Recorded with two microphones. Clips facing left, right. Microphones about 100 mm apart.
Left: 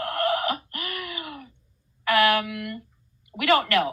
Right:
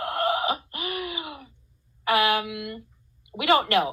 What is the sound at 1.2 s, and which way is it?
Groan, 50° left (ahead or behind).